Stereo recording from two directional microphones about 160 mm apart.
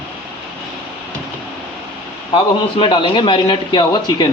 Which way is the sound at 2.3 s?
30° left (ahead or behind).